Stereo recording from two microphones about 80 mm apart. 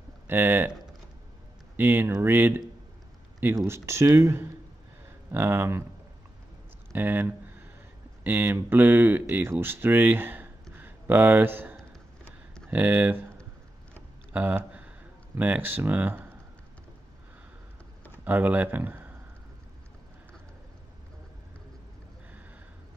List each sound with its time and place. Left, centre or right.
0.3 s speech: right
1.8 s speech: right
3.6 s speech: right
6.9 s a sound: right
8.2 s speech: right
14.3 s a sound: centre
18.2 s speech: right